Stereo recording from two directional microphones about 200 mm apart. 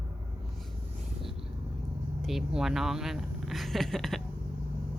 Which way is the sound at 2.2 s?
Centre (ahead or behind).